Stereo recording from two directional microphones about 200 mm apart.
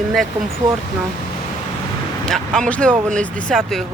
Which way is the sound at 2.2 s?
Centre (ahead or behind).